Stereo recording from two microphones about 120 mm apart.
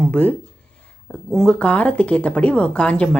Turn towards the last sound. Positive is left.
turn(degrees=10)  # may be behind; listen again after turning